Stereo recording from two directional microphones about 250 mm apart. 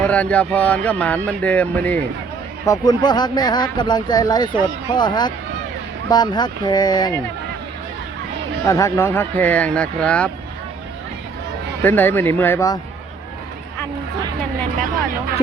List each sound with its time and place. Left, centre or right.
0.0 s speech: centre
8.6 s speech: centre
11.8 s speech: centre